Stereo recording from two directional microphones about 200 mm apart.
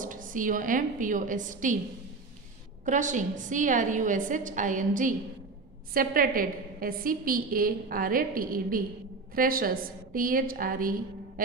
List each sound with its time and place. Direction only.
0.0 s a woman's voice: 40° right (ahead or behind)
2.8 s a woman's voice: 40° right (ahead or behind)